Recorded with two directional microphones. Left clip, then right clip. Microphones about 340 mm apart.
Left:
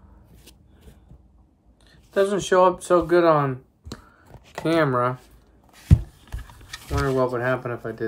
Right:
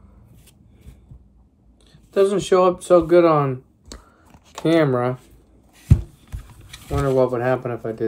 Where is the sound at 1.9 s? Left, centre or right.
Centre.